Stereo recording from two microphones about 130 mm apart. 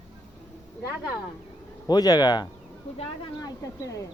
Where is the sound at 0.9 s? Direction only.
10° right (ahead or behind).